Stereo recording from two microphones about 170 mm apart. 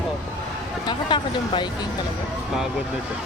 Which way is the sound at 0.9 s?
25° left (ahead or behind).